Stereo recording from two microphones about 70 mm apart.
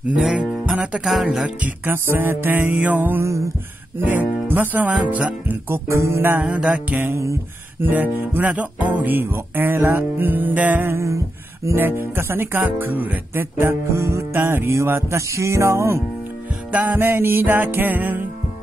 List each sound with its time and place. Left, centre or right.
0.1 s speech: centre
1.9 s music: right
3.3 s music: right
4.0 s music: right
5.7 s music: right
6.4 s music: centre
7.1 s music: right
7.8 s music: right
13.9 s music: right
14.3 s music: right
16.7 s music: right